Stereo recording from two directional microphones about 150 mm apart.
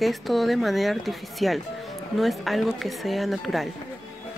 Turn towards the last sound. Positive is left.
turn(degrees=0)  # may be behind; listen again after turning